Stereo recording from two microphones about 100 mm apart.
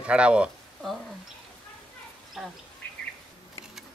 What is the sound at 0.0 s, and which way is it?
Speech, 10° right (ahead or behind).